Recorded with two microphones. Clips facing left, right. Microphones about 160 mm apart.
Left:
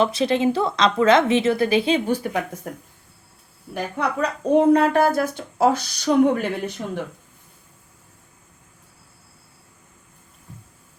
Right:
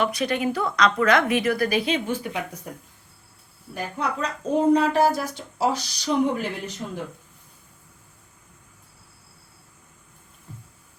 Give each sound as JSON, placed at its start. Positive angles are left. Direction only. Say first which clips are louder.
{"t": 0.0, "sound": "a woman's voice", "louder": "left 5 dB", "side_deg": 25}
{"t": 3.9, "sound": "speech", "louder": "left 4 dB", "side_deg": 65}